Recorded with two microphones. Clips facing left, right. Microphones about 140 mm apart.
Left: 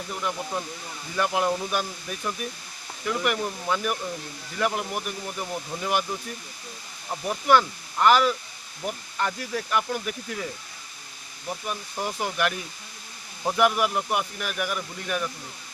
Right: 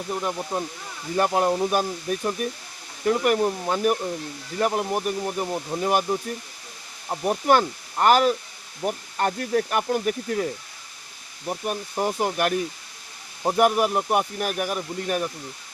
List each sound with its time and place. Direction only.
0.1 s speech: 35° right (ahead or behind)
11.6 s speech: 45° right (ahead or behind)
13.6 s speech: 40° right (ahead or behind)